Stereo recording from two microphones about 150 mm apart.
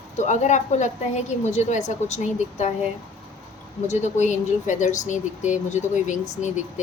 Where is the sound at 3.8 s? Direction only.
50° left (ahead or behind).